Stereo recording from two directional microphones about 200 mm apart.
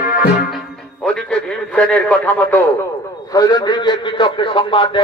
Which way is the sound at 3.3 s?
20° left (ahead or behind).